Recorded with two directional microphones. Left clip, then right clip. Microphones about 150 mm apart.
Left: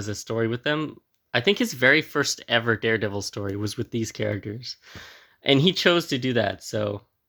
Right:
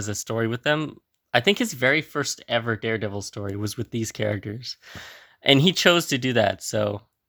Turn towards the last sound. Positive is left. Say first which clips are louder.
# right 3 dB
turn(degrees=-35)  # may be behind; listen again after turning